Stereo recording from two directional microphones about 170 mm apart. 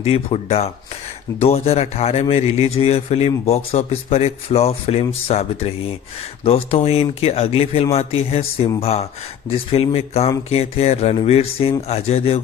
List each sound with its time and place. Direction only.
0.0 s speech: 35° left (ahead or behind)